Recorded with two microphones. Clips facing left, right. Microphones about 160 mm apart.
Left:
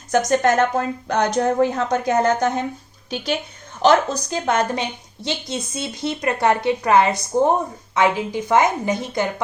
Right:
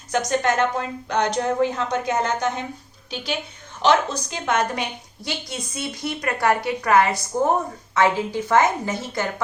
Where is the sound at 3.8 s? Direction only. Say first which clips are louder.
Left 3 dB; 40° left (ahead or behind).